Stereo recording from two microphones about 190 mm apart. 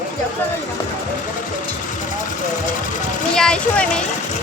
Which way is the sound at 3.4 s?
5° left (ahead or behind).